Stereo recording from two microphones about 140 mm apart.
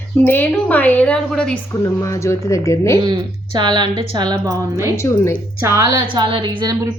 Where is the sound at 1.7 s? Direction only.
20° left (ahead or behind).